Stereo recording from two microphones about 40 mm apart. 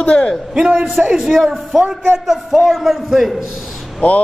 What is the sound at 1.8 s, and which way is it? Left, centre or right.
Speech, right.